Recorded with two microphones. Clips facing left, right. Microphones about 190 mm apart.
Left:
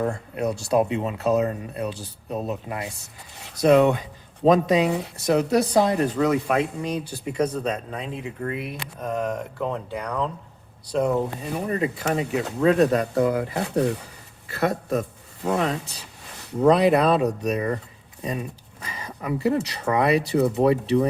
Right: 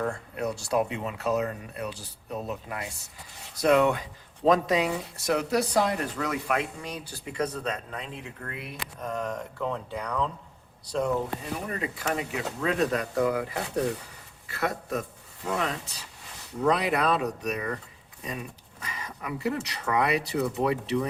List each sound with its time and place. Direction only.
0.0 s speech: 20° left (ahead or behind)
11.7 s a man's voice: 30° left (ahead or behind)